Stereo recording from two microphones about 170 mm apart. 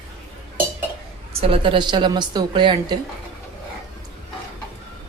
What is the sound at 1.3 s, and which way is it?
A woman's voice, 35° right (ahead or behind).